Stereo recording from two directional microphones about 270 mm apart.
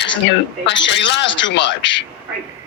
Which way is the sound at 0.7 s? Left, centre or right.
Left.